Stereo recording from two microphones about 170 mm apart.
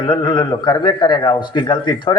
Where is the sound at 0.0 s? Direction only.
30° left (ahead or behind).